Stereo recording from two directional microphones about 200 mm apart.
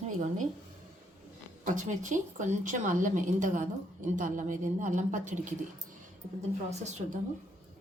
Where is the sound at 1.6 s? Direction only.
40° right (ahead or behind).